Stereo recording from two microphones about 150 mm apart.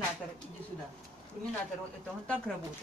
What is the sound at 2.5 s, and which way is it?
Speech, 5° left (ahead or behind).